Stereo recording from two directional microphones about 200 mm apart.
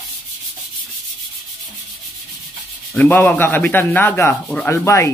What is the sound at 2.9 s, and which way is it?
Speech, 10° left (ahead or behind).